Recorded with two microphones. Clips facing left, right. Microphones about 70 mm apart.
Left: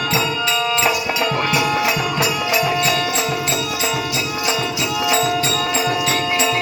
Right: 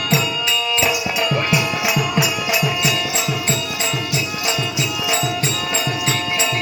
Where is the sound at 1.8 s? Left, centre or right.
Centre.